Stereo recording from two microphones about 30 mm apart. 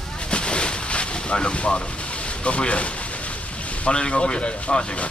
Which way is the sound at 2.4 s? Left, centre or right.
Left.